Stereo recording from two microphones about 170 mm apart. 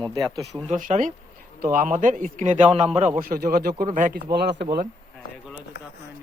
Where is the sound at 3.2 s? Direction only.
60° right (ahead or behind).